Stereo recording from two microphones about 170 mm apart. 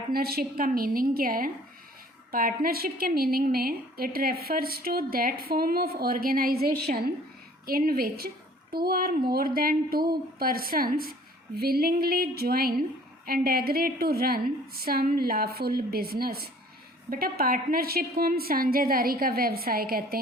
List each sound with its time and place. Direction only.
0.1 s a woman's voice: 65° right (ahead or behind)